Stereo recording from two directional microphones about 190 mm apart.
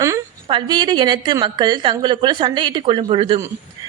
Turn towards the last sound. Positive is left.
turn(degrees=-25)  # may be behind; listen again after turning